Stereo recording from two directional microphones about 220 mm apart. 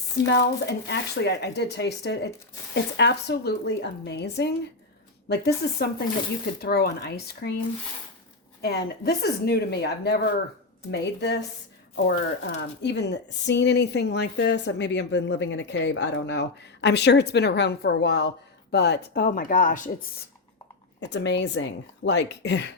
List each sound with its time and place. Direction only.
0.3 s speech: 50° left (ahead or behind)
8.6 s speech: 45° left (ahead or behind)
21.0 s speech: 55° left (ahead or behind)